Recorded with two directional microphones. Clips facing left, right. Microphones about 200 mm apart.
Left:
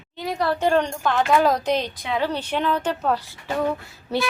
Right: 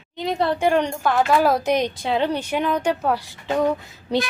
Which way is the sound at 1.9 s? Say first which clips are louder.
Right 3 dB; 30° right (ahead or behind).